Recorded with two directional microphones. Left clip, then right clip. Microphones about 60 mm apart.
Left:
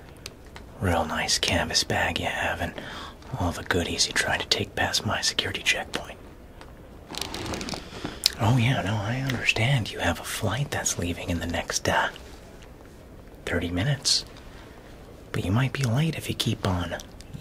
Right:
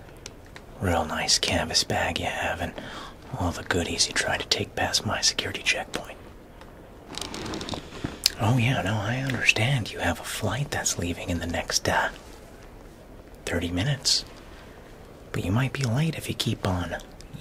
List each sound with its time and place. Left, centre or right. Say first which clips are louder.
0.7 s speech: even; centre
7.2 s a sound: left 2 dB; centre
8.2 s a sound: even; centre
8.8 s speech: right 1 dB; centre
9.8 s speech: left 1 dB; left
10.2 s speech: even; centre
13.6 s speech: even; centre
15.3 s speech: even; centre